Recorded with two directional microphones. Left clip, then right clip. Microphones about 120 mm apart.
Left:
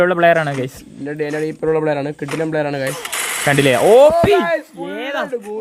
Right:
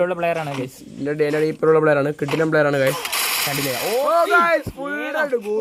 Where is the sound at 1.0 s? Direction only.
20° right (ahead or behind).